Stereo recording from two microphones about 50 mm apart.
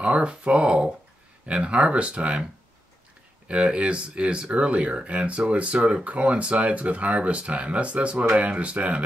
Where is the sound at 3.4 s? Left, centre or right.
Right.